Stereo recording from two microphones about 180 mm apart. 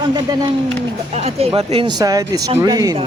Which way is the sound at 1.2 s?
35° right (ahead or behind).